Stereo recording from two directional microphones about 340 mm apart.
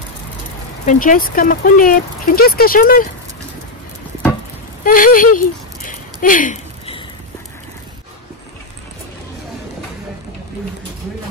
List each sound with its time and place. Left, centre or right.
0.8 s speech: left
4.8 s speech: left
5.9 s a sound: left